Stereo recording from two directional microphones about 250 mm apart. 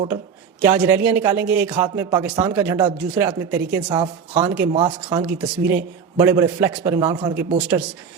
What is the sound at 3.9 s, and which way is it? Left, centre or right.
Speech, centre.